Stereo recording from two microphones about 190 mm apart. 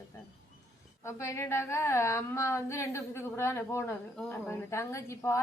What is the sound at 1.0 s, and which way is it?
A woman's voice, 15° left (ahead or behind).